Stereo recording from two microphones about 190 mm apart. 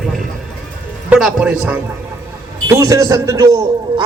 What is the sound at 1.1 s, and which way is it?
A man's voice, 5° right (ahead or behind).